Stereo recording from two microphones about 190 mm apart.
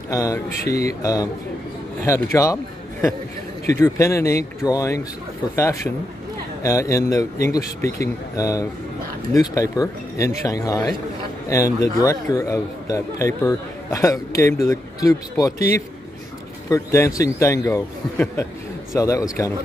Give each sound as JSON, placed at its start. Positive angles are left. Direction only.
{"t": 0.1, "sound": "a man's voice", "side_deg": 15}